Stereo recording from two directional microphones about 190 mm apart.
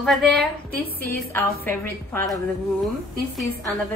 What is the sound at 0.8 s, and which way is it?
Speech, 50° left (ahead or behind).